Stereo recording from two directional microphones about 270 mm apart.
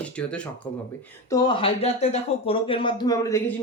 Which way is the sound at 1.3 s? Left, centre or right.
Centre.